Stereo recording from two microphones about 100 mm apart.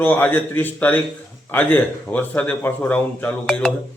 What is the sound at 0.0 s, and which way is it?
A man's voice, 20° left (ahead or behind).